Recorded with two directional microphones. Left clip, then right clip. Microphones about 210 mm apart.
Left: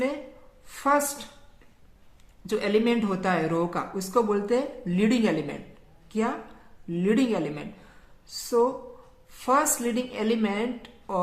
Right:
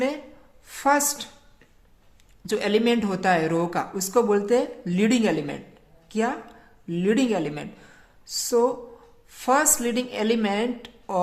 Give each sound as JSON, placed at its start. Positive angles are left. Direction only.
{"t": 0.8, "sound": "speech", "side_deg": -25}
{"t": 2.5, "sound": "speech", "side_deg": -25}